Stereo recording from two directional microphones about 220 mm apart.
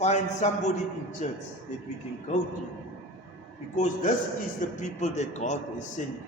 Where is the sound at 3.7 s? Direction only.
35° left (ahead or behind).